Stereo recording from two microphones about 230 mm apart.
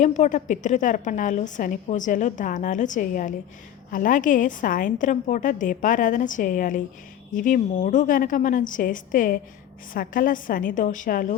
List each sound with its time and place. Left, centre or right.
0.0 s a woman's voice: left